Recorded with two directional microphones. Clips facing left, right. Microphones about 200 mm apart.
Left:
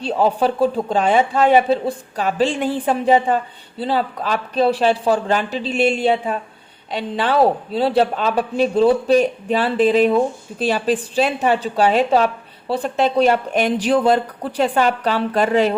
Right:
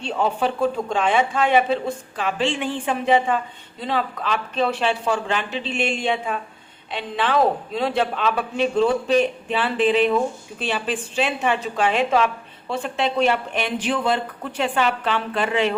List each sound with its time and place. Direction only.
0.0 s speech: 35° left (ahead or behind)